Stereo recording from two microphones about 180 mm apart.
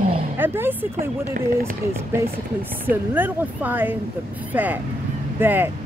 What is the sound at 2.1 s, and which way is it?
Speech, 15° right (ahead or behind).